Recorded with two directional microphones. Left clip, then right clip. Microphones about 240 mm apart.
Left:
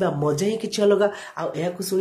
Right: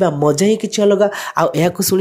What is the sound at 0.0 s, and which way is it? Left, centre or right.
Speech, right.